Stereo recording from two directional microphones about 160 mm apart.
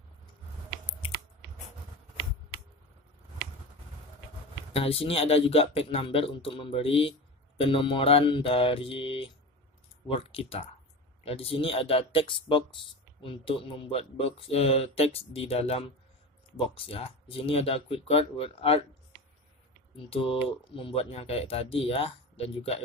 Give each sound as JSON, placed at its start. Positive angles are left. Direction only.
{"t": 4.7, "sound": "speech", "side_deg": 35}
{"t": 20.1, "sound": "speech", "side_deg": 35}